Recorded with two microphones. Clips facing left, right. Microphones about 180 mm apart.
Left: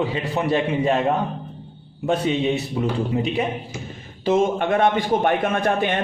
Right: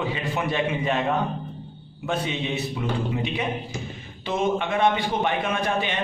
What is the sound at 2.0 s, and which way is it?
Speech, 35° left (ahead or behind).